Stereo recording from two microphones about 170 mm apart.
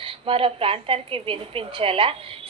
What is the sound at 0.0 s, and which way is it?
A woman's voice, 35° right (ahead or behind).